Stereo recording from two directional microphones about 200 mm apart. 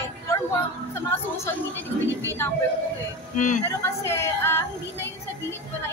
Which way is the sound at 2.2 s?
10° left (ahead or behind).